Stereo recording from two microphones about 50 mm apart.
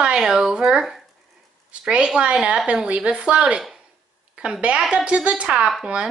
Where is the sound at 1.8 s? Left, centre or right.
Centre.